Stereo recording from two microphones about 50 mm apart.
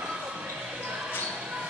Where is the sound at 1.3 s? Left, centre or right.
Centre.